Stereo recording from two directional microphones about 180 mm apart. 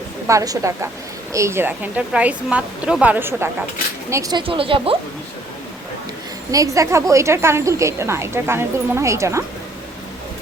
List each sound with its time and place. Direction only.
0.3 s a woman's voice: 20° right (ahead or behind)
6.5 s a woman's voice: 20° right (ahead or behind)